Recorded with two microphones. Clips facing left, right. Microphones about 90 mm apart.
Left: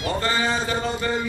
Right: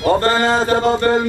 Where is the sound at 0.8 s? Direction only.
80° right.